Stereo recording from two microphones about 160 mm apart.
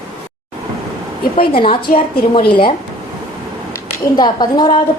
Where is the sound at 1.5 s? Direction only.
30° left (ahead or behind).